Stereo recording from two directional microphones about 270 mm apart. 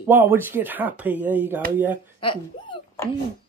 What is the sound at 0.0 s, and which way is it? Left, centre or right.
Speech, centre.